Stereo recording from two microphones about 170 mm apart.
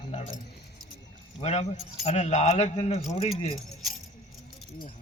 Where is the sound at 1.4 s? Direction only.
40° left (ahead or behind).